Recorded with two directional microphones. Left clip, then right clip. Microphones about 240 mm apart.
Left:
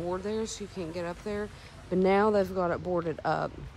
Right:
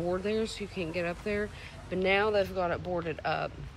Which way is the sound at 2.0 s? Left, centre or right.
Centre.